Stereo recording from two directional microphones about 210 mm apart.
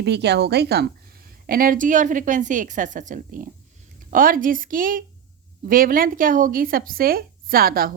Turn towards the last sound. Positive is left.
turn(degrees=-45)  # may be behind; listen again after turning